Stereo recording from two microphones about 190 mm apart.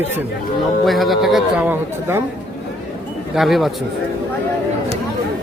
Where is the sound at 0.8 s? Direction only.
Centre (ahead or behind).